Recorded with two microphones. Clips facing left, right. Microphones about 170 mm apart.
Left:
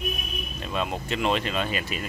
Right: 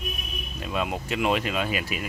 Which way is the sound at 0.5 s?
10° right (ahead or behind).